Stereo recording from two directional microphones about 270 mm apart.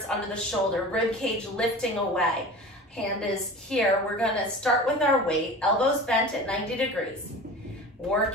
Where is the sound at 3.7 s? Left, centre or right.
Centre.